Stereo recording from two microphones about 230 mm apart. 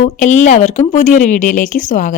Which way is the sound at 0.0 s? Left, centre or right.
Left.